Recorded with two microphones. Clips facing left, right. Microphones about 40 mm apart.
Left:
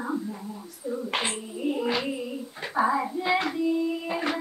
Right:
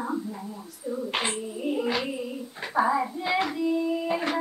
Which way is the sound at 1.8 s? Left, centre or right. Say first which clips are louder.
Even; centre.